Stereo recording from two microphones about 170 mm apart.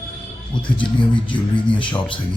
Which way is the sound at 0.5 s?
30° left (ahead or behind).